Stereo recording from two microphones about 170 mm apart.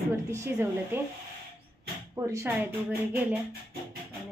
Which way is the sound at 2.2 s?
15° right (ahead or behind).